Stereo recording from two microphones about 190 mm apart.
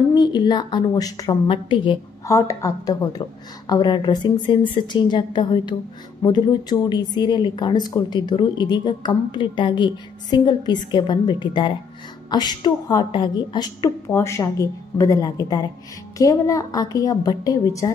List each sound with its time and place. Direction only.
0.1 s a woman's voice: 20° left (ahead or behind)